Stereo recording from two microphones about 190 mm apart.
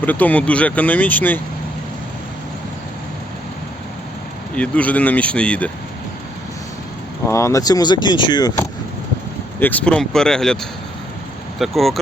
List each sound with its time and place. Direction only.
0.0 s speech: 10° left (ahead or behind)
4.5 s speech: 5° left (ahead or behind)
7.3 s speech: 15° left (ahead or behind)
9.6 s speech: 10° left (ahead or behind)